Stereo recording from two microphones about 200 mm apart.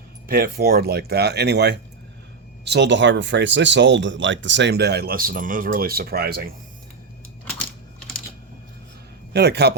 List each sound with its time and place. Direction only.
0.3 s speech: 50° right (ahead or behind)
9.3 s speech: 55° right (ahead or behind)